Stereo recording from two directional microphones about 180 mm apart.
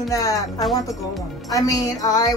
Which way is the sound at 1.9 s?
20° left (ahead or behind).